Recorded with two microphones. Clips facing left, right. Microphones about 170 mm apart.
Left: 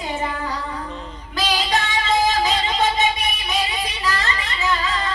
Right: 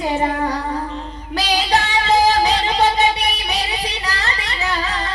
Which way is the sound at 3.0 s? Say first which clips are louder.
Right 4 dB; 65° right (ahead or behind).